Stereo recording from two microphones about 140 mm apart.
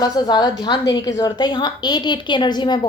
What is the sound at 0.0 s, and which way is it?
A woman's voice, 30° left (ahead or behind).